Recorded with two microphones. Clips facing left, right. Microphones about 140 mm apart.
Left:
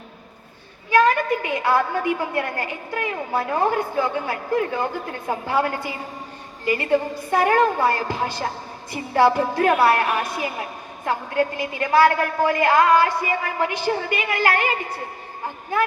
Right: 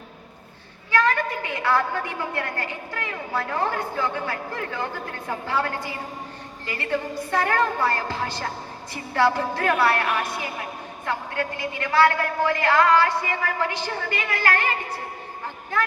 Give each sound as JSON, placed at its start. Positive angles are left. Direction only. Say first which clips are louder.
{"t": 0.9, "sound": "a woman's voice", "louder": "left 5 dB", "side_deg": 15}